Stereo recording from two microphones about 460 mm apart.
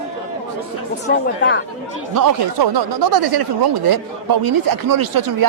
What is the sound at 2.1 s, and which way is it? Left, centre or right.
Speech, right.